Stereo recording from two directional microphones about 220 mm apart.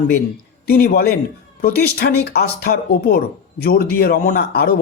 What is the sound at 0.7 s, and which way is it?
Speech, 45° left (ahead or behind).